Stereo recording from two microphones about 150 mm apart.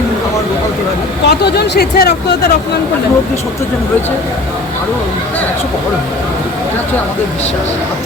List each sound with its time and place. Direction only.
1.3 s speech: 90° left